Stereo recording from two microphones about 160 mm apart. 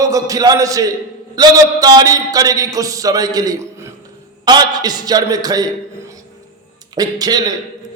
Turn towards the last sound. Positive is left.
turn(degrees=-25)  # may be behind; listen again after turning